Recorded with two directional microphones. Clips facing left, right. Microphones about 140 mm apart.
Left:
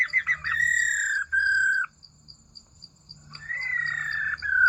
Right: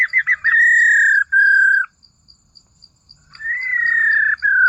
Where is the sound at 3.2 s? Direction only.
25° left (ahead or behind).